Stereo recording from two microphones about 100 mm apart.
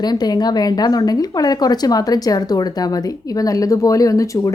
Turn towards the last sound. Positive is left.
turn(degrees=35)  # may be behind; listen again after turning